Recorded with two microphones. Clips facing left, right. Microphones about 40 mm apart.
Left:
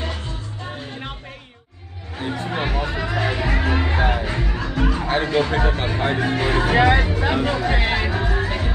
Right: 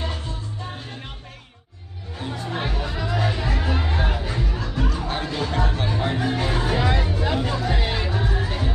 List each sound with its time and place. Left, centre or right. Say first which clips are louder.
2.1 s music: left 4 dB; left
6.7 s music: left 6 dB; left
8.1 s music: left 3 dB; centre
8.5 s music: left 2 dB; left